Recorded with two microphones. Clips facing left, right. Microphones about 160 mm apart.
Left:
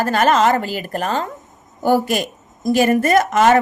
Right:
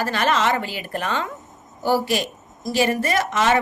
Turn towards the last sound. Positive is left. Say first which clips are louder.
# left 6 dB
turn(degrees=45)  # may be behind; listen again after turning